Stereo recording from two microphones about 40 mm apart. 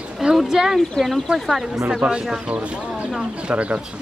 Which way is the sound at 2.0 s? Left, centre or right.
Right.